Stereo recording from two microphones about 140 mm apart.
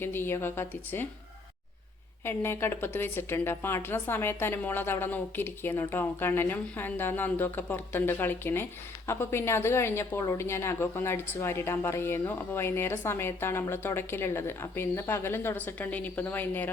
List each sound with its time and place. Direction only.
0.0 s speech: 15° left (ahead or behind)
2.2 s speech: 15° left (ahead or behind)